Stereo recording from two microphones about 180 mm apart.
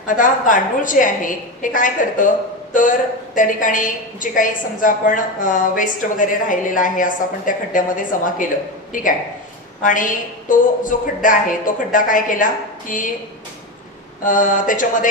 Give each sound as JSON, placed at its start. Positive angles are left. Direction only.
{"t": 0.0, "sound": "a woman's voice", "side_deg": 45}
{"t": 10.5, "sound": "a woman's voice", "side_deg": 45}
{"t": 14.2, "sound": "a woman's voice", "side_deg": 45}